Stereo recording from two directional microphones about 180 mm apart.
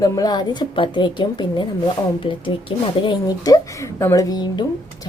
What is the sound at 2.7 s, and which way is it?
A woman's voice, 25° left (ahead or behind).